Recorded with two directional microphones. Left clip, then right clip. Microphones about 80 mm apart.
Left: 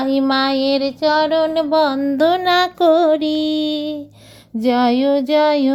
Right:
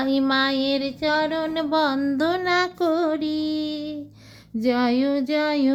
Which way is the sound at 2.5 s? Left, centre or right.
Left.